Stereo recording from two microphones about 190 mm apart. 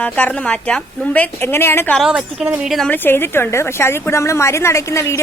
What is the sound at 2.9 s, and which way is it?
A woman's voice, 10° left (ahead or behind).